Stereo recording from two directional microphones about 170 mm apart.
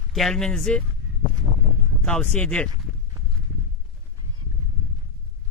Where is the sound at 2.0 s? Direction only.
5° left (ahead or behind).